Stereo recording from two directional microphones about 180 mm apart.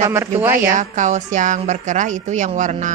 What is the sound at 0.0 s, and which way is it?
Speech, 15° right (ahead or behind).